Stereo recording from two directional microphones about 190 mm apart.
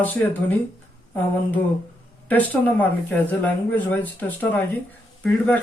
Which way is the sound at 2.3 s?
10° left (ahead or behind).